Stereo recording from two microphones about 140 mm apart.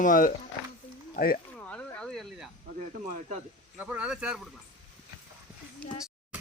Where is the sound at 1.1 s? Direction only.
90° left.